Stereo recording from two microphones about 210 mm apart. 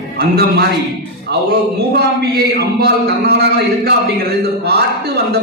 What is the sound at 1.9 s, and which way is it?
Speech, 50° right (ahead or behind).